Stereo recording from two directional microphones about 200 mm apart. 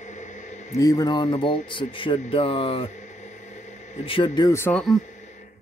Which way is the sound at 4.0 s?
25° left (ahead or behind).